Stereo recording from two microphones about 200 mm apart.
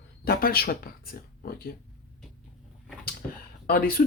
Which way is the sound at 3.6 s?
50° left (ahead or behind).